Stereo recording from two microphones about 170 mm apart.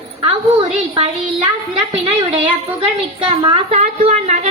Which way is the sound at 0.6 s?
30° right (ahead or behind).